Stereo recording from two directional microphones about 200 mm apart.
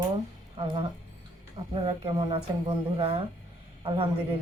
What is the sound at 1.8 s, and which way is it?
Speech, 25° right (ahead or behind).